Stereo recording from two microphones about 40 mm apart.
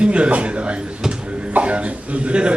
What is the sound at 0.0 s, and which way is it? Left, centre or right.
A man's voice, right.